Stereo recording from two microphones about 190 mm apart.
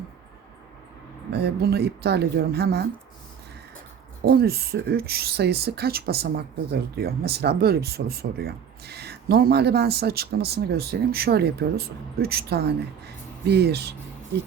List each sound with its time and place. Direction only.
1.3 s speech: 60° right (ahead or behind)
4.3 s speech: 55° right (ahead or behind)